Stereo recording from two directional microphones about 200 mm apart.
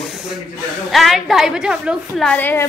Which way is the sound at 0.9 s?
Centre (ahead or behind).